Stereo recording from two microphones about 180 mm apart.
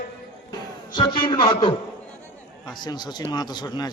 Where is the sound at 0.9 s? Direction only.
25° left (ahead or behind).